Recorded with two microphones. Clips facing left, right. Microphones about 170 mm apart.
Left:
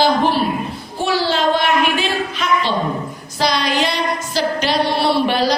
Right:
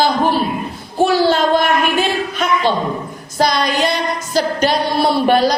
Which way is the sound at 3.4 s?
50° right (ahead or behind).